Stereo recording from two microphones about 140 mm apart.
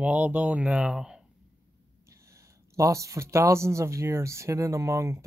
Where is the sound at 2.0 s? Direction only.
20° right (ahead or behind).